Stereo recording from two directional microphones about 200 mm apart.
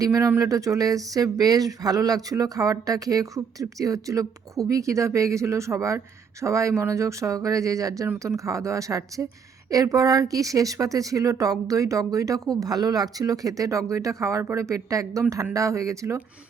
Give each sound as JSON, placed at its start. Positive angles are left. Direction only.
{"t": 0.0, "sound": "speech", "side_deg": -15}